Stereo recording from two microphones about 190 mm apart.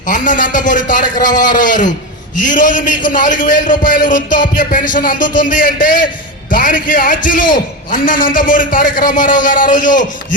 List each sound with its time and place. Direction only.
0.1 s a man's voice: 45° left (ahead or behind)